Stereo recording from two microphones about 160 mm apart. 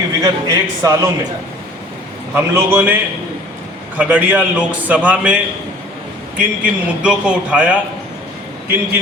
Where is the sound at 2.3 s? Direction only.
10° right (ahead or behind).